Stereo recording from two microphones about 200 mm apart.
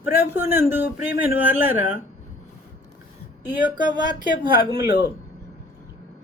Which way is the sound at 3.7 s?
20° right (ahead or behind).